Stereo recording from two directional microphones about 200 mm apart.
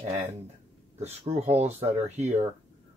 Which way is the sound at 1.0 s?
35° right (ahead or behind).